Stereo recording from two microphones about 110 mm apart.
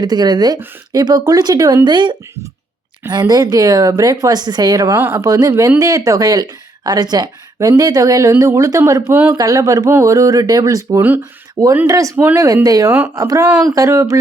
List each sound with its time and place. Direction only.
0.0 s speech: 40° right (ahead or behind)
9.1 s speech: 15° right (ahead or behind)
9.4 s speech: 30° right (ahead or behind)
12.6 s speech: 30° right (ahead or behind)